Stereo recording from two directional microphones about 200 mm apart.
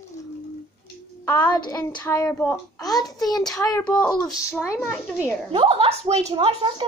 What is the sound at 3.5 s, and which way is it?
Child singing, 15° left (ahead or behind).